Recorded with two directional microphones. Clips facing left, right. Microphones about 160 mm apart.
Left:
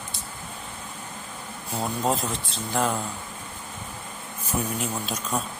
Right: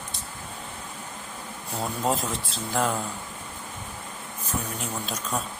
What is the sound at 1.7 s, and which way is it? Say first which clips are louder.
Speech: left 1 dB; centre (ahead or behind).